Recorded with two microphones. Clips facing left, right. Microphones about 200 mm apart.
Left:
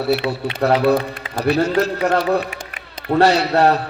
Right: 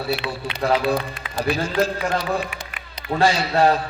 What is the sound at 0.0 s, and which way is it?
A man's voice, 65° left (ahead or behind).